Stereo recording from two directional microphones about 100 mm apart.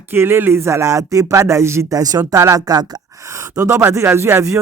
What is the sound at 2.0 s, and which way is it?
Speech, 40° right (ahead or behind).